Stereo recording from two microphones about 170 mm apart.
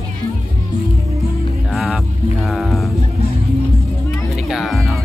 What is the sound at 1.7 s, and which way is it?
Music, centre (ahead or behind).